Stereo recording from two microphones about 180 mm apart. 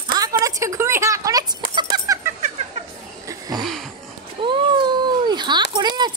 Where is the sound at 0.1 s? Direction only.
20° right (ahead or behind).